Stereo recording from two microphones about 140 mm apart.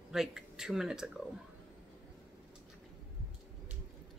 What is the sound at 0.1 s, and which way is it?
Speech, 5° right (ahead or behind).